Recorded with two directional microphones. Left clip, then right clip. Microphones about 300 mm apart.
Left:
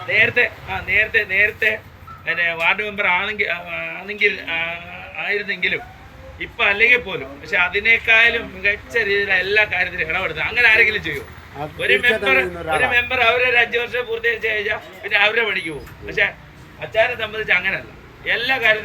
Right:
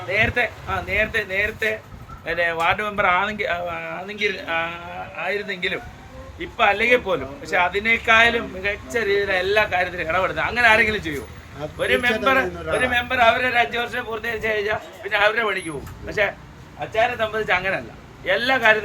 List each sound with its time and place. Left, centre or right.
0.1 s a man's voice: centre